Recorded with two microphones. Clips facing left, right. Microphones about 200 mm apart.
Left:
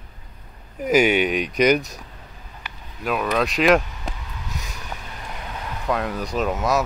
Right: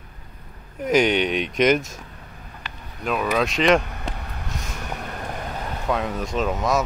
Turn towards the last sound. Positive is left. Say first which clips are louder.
# even
turn(degrees=0)  # may be behind; listen again after turning